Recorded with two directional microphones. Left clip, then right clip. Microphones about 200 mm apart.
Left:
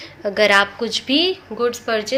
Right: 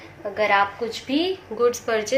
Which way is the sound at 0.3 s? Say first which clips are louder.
Left 5 dB; 50° left (ahead or behind).